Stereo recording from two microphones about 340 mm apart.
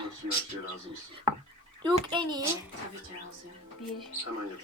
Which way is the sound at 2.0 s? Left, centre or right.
Centre.